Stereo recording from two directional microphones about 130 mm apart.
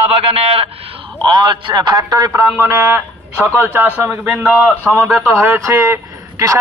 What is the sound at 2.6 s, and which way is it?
A man's voice, 20° right (ahead or behind).